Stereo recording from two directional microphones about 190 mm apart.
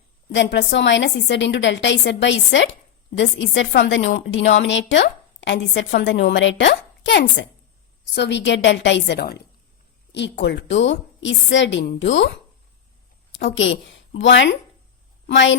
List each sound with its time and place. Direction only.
0.3 s a woman's voice: 70° left (ahead or behind)
5.9 s a woman's voice: 60° left (ahead or behind)
10.1 s a woman's voice: 65° left (ahead or behind)
13.3 s a woman's voice: 80° left